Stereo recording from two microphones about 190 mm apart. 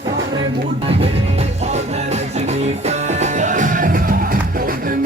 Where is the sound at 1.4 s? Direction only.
35° right (ahead or behind).